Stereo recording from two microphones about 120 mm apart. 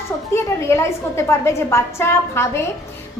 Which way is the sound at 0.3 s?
25° left (ahead or behind).